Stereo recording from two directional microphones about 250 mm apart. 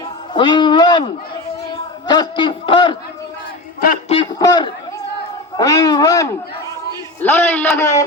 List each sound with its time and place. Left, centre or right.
0.3 s a man's voice: centre
4.1 s a man's voice: centre